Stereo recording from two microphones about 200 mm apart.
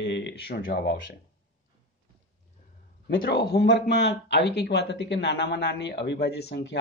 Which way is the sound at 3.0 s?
55° left (ahead or behind).